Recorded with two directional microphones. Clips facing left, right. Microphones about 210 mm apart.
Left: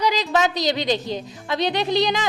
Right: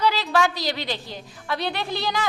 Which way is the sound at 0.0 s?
15° left (ahead or behind).